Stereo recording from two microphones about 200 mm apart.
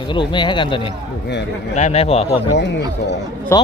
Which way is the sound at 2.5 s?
60° left (ahead or behind).